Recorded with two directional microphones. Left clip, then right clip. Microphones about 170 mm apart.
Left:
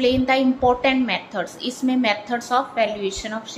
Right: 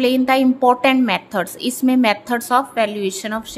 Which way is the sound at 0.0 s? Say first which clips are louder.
Right 3 dB; 50° right (ahead or behind).